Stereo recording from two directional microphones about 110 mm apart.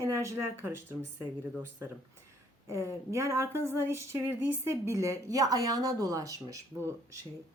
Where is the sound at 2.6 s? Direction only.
30° right (ahead or behind).